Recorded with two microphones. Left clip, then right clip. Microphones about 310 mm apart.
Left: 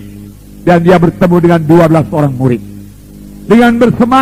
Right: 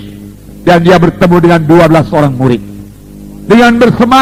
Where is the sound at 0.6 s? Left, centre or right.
Right.